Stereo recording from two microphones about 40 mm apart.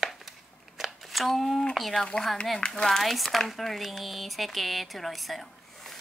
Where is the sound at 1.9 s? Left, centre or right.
Centre.